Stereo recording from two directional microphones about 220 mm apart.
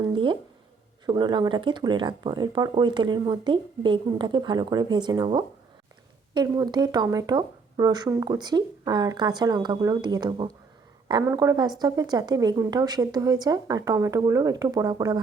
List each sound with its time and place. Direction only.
0.0 s speech: 20° right (ahead or behind)